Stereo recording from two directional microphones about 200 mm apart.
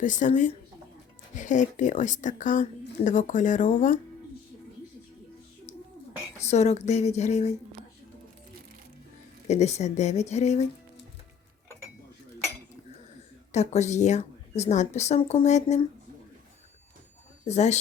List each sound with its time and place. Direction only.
0.0 s a woman's voice: 40° left (ahead or behind)
6.4 s a woman's voice: 35° left (ahead or behind)
9.5 s a woman's voice: 35° left (ahead or behind)
13.5 s a woman's voice: 35° left (ahead or behind)
17.4 s speech: 35° left (ahead or behind)